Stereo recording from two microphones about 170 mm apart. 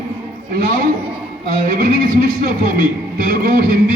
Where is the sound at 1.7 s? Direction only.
55° right (ahead or behind).